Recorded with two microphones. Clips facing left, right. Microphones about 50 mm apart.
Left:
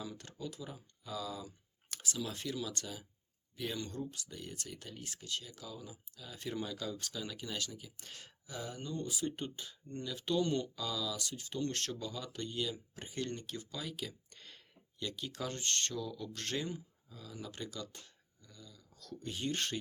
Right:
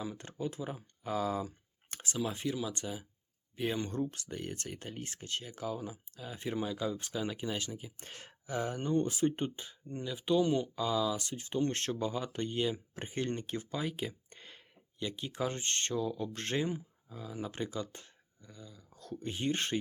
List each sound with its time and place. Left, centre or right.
0.0 s speech: right
10.8 s speech: right